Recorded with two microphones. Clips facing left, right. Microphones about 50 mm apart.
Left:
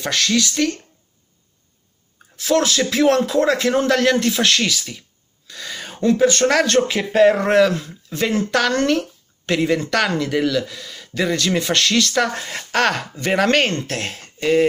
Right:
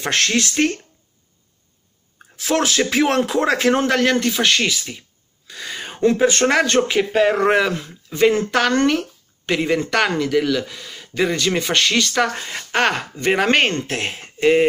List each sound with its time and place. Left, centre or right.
0.0 s speech: right
2.3 s a man's voice: right
5.5 s a sound: centre
5.9 s speech: right
6.6 s a man's voice: centre
12.7 s speech: centre